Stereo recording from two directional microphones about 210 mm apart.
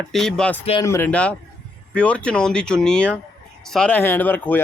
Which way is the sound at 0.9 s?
10° left (ahead or behind).